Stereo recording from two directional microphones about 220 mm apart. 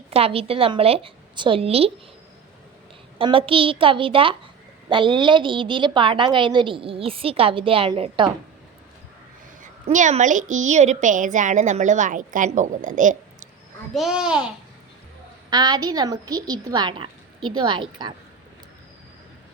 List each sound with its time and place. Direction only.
0.1 s a woman's voice: 25° right (ahead or behind)
3.2 s a woman's voice: 25° right (ahead or behind)
9.8 s a woman's voice: 35° right (ahead or behind)
13.9 s a child's voice: centre (ahead or behind)
15.4 s a woman's voice: 20° right (ahead or behind)